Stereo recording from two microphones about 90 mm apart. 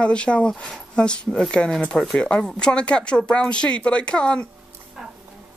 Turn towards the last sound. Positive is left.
turn(degrees=10)  # may be behind; listen again after turning